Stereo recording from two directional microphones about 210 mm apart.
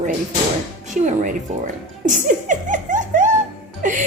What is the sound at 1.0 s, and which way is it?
Speech, 40° right (ahead or behind).